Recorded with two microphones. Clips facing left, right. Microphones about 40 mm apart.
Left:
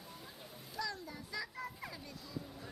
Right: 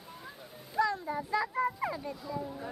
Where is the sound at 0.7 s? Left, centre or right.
Right.